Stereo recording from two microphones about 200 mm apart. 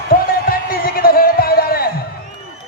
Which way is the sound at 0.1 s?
45° left (ahead or behind).